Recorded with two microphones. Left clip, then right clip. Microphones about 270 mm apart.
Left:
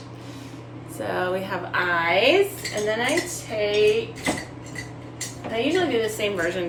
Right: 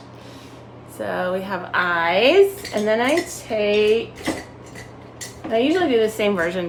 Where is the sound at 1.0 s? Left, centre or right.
Centre.